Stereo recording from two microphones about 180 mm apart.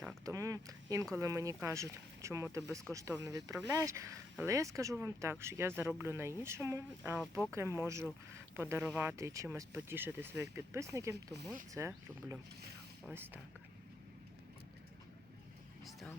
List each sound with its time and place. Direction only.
0.3 s speech: 20° right (ahead or behind)